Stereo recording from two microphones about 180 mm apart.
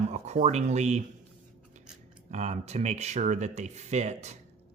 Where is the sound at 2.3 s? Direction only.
40° right (ahead or behind).